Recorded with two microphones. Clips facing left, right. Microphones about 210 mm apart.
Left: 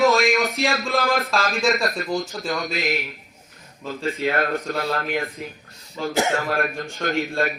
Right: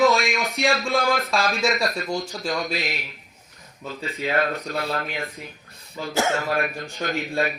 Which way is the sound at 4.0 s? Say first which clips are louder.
Left 1 dB; 50° left (ahead or behind).